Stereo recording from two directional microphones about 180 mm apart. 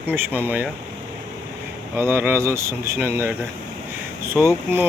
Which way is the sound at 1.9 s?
15° right (ahead or behind).